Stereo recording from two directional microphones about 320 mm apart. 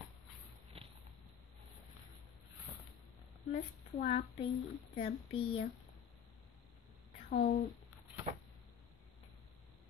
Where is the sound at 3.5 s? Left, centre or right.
Left.